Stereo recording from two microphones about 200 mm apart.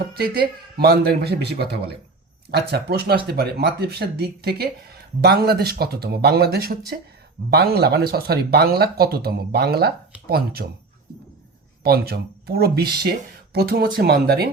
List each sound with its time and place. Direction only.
0.1 s speech: 50° right (ahead or behind)
11.8 s speech: 50° right (ahead or behind)